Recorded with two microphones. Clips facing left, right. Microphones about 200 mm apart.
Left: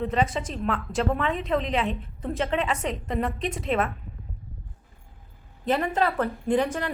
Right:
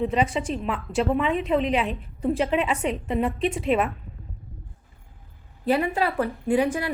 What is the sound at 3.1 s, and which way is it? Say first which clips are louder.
Speech: right 3 dB; 5° right (ahead or behind).